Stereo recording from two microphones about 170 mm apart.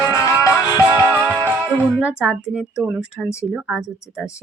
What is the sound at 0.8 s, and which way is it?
Music, 15° right (ahead or behind).